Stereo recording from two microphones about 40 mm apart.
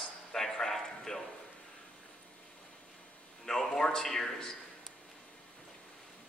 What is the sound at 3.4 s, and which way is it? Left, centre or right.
A man's voice, centre.